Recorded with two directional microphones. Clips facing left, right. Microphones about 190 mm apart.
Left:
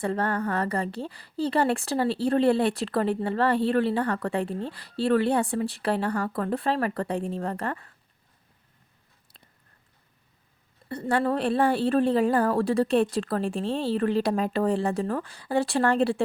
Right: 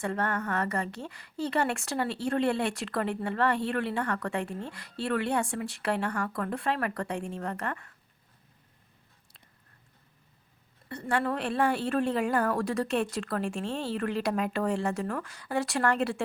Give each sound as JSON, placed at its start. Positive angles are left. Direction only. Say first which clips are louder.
{"t": 0.0, "sound": "a woman's voice", "louder": "left 4 dB", "side_deg": 35}
{"t": 11.1, "sound": "a woman's voice", "louder": "left 5 dB", "side_deg": 35}